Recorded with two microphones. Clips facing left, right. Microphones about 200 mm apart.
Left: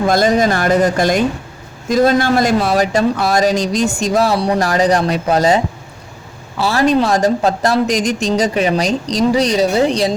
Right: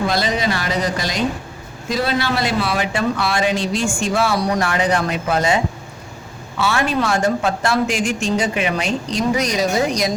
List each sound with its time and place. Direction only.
0.1 s speech: 45° left (ahead or behind); by 10.1 s 30° left (ahead or behind)